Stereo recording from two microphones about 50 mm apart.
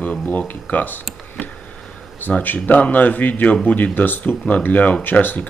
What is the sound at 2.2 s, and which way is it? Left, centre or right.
Speech, left.